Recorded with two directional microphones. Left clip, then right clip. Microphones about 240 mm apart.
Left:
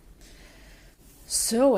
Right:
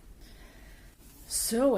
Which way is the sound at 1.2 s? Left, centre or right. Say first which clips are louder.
Left 5 dB; centre.